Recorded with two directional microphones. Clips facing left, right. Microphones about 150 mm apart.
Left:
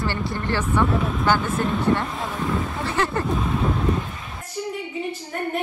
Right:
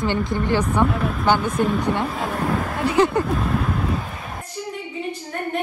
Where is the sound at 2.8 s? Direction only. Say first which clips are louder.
Right 9 dB; 15° right (ahead or behind).